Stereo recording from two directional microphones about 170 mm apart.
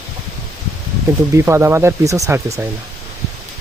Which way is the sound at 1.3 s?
15° right (ahead or behind).